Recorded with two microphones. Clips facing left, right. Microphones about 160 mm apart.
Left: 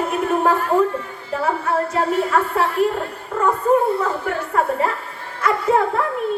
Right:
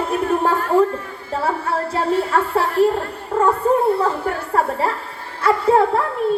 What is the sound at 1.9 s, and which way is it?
Speech, 30° right (ahead or behind).